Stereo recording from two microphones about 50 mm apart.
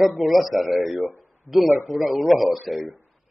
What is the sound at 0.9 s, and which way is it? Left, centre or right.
Speech, right.